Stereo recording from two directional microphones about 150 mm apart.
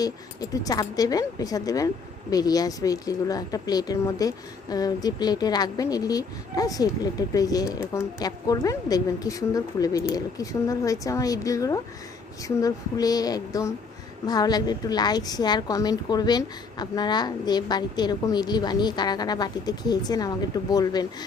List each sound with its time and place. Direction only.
0.5 s speech: 25° left (ahead or behind)